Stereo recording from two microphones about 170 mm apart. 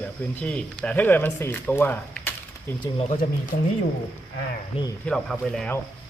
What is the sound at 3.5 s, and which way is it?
Speech, 60° left (ahead or behind).